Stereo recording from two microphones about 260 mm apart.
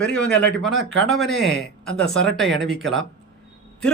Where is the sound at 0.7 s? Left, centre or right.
Right.